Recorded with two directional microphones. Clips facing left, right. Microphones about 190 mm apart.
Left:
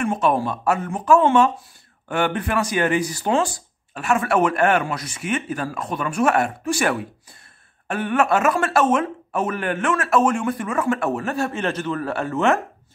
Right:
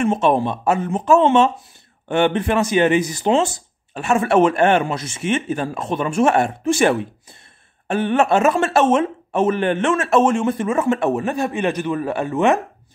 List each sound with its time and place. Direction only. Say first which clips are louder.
0.0 s speech: right 3 dB; 25° right (ahead or behind)